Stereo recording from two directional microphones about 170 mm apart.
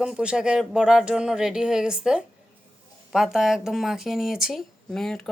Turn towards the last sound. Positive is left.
turn(degrees=5)  # may be behind; listen again after turning